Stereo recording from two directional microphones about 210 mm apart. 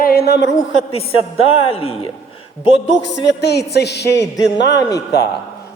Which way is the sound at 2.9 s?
55° left (ahead or behind).